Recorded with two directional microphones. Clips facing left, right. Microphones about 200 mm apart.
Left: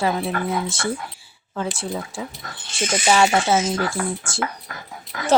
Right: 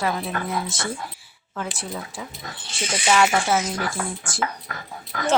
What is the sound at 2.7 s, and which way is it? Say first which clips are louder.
Speech: left 3 dB; 45° left (ahead or behind).